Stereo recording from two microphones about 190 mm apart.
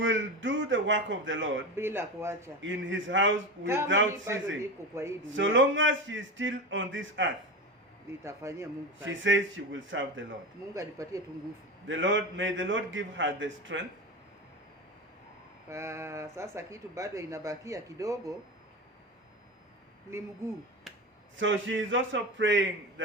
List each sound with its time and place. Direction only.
0.0 s a man's voice: 80° right
1.7 s speech: 10° right (ahead or behind)
2.6 s a man's voice: 80° right
4.6 s speech: 15° right (ahead or behind)
5.2 s a man's voice: 80° right
8.2 s speech: 15° right (ahead or behind)
9.0 s a man's voice: 80° right
10.8 s speech: 15° right (ahead or behind)
11.9 s a man's voice: 80° right
15.7 s speech: 15° right (ahead or behind)
20.1 s speech: 15° right (ahead or behind)
21.3 s a man's voice: 80° right